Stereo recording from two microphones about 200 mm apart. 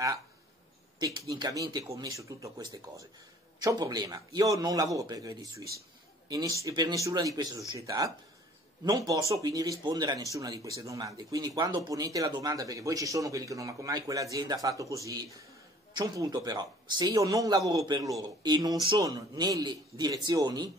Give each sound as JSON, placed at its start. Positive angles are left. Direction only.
{"t": 0.9, "sound": "a man's voice", "side_deg": -20}